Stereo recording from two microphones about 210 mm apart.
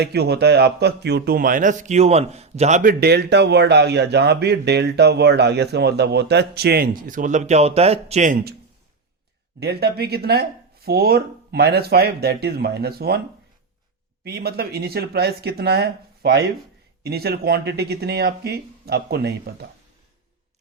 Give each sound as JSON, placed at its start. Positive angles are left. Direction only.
{"t": 0.0, "sound": "speech", "side_deg": -50}
{"t": 9.6, "sound": "speech", "side_deg": -50}
{"t": 14.3, "sound": "speech", "side_deg": -50}